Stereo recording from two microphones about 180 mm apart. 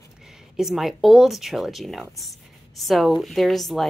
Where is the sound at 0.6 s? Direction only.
Centre (ahead or behind).